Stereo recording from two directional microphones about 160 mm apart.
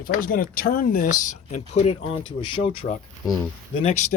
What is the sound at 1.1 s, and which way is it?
Speech, 50° left (ahead or behind).